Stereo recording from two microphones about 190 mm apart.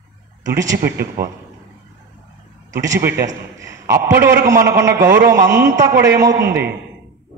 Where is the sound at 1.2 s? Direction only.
50° right (ahead or behind).